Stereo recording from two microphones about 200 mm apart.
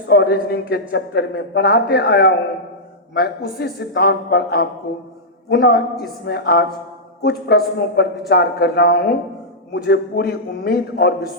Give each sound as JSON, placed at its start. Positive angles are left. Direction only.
{"t": 0.1, "sound": "speech", "side_deg": 50}